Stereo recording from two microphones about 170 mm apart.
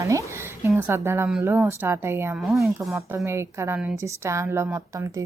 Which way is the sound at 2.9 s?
15° right (ahead or behind).